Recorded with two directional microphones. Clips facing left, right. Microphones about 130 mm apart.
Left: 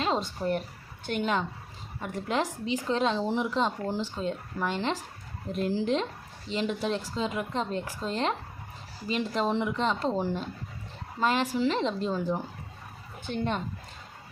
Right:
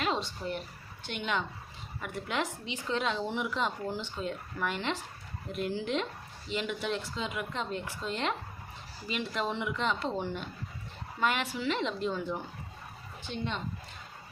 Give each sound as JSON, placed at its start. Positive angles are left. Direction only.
{"t": 0.0, "sound": "a woman's voice", "side_deg": 40}
{"t": 13.2, "sound": "speech", "side_deg": 50}